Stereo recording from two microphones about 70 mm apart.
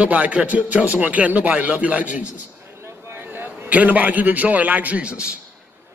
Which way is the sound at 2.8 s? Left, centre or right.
Right.